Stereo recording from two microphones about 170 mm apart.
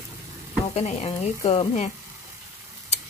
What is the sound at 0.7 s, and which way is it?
Stir, 40° left (ahead or behind).